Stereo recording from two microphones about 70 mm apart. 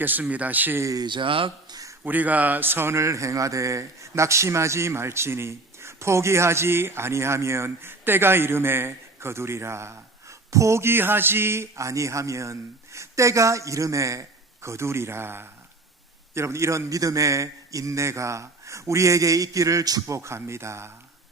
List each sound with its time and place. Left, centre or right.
0.0 s speech: right
1.7 s a sound: right
2.0 s a man's voice: right
20.1 s speech: right